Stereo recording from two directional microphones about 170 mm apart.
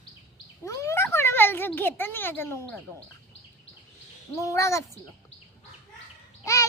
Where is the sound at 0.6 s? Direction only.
20° left (ahead or behind).